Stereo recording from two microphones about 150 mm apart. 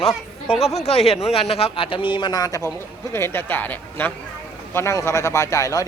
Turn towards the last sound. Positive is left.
turn(degrees=20)  # may be behind; listen again after turning